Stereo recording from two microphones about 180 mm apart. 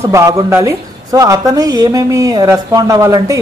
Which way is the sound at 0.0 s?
20° right (ahead or behind).